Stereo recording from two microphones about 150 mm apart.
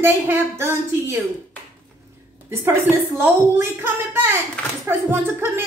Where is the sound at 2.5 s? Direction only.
15° right (ahead or behind).